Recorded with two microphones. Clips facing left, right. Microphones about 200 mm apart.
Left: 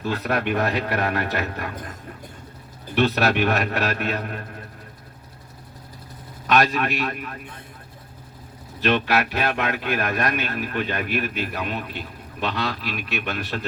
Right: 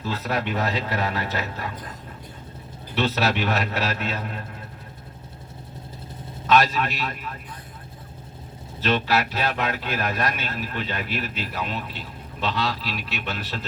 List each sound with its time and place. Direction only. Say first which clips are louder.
0.0 s a man's voice: left 3 dB; 55° left (ahead or behind)
6.6 s a man's voice: left 2 dB; 55° left (ahead or behind)
8.9 s a man's voice: left 1 dB; 55° left (ahead or behind)